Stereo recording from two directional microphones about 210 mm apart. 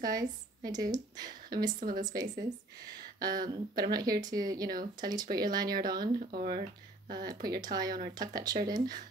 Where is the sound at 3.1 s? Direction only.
20° right (ahead or behind).